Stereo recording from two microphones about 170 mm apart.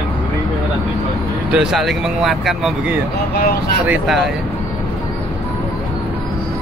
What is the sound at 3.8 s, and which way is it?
Speech, 5° right (ahead or behind).